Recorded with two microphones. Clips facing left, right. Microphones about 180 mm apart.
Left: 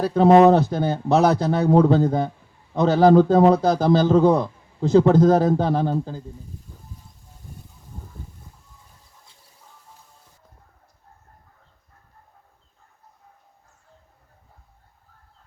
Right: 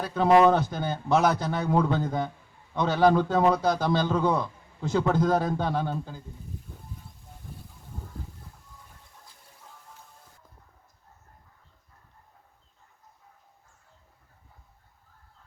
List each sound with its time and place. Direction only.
0.0 s a man's voice: 30° left (ahead or behind)